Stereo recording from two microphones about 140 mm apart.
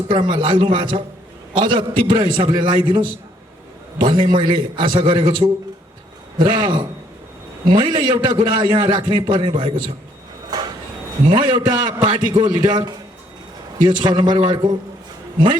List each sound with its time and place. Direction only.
0.1 s a man's voice: 35° right (ahead or behind)
4.0 s a man's voice: 35° right (ahead or behind)
10.5 s a sound: 30° right (ahead or behind)
11.3 s a man's voice: 35° right (ahead or behind)